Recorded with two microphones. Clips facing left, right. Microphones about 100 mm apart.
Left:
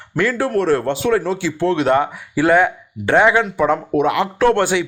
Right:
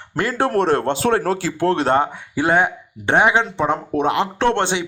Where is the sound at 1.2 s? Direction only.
45° right (ahead or behind).